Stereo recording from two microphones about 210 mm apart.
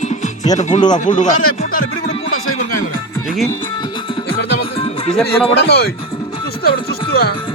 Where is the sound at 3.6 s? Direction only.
25° left (ahead or behind).